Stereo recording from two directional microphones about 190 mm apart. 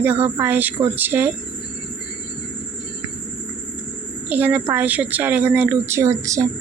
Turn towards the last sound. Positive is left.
turn(degrees=-15)  # may be behind; listen again after turning